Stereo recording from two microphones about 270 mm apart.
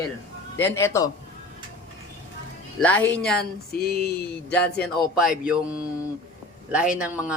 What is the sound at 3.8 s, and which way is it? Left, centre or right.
Speech, left.